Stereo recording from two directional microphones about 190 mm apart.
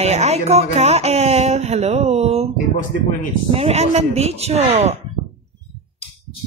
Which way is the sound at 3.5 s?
35° right (ahead or behind).